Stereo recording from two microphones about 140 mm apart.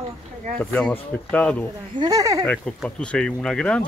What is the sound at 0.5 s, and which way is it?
Speech, 10° left (ahead or behind).